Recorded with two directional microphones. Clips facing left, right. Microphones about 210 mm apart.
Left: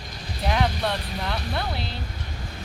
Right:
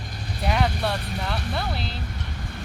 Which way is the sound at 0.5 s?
Centre (ahead or behind).